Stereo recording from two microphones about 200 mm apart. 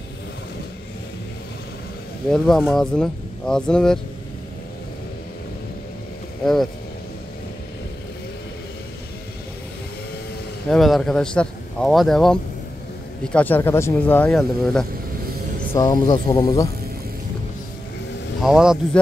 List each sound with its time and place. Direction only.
2.3 s speech: centre (ahead or behind)
6.4 s speech: centre (ahead or behind)
10.7 s speech: centre (ahead or behind)
15.7 s speech: 20° left (ahead or behind)
18.4 s speech: centre (ahead or behind)